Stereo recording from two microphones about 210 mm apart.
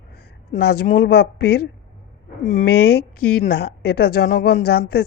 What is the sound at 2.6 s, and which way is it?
A woman's voice, 50° left (ahead or behind).